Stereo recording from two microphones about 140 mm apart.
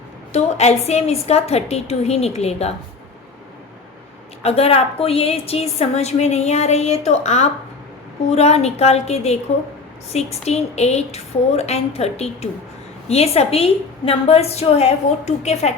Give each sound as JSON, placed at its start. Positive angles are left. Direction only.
{"t": 0.3, "sound": "a woman's voice", "side_deg": 50}
{"t": 4.4, "sound": "a woman's voice", "side_deg": 45}